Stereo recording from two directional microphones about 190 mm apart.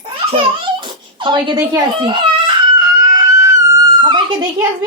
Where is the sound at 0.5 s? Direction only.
25° right (ahead or behind).